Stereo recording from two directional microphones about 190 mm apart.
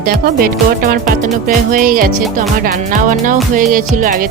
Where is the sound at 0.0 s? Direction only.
50° right (ahead or behind).